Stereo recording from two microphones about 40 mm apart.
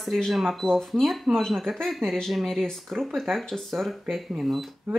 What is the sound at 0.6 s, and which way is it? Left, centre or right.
Speech, centre.